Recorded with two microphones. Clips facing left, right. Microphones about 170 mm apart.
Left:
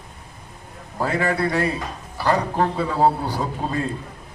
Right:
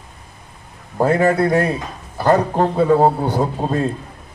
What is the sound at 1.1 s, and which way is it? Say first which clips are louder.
A man's voice: right 7 dB; 45° right (ahead or behind).